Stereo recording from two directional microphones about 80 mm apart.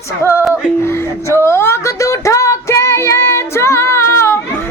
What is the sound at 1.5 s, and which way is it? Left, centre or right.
Music, left.